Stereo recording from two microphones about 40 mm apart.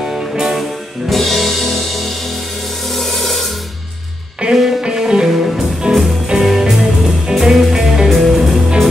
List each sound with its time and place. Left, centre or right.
0.0 s music: centre
2.9 s a sound: centre
4.4 s music: right; by 5.6 s centre
5.9 s music: right
7.3 s music: centre